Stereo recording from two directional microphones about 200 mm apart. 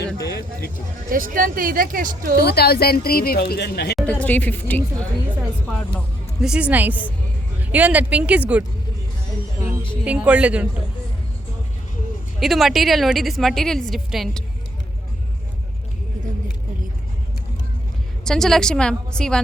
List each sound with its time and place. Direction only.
0.0 s a sound: 55° left (ahead or behind)
1.1 s speech: 45° right (ahead or behind)
2.4 s speech: 55° left (ahead or behind)
4.2 s a woman's voice: 10° left (ahead or behind)
6.4 s speech: 5° right (ahead or behind)
9.6 s music: 15° right (ahead or behind)
10.0 s speech: 5° right (ahead or behind)
12.4 s a woman's voice: centre (ahead or behind)
18.3 s a woman's voice: centre (ahead or behind)